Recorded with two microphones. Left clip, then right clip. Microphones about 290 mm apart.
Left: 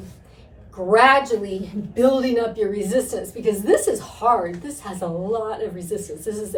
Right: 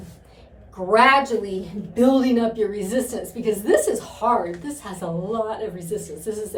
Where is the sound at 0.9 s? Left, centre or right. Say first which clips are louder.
Left 1 dB; centre.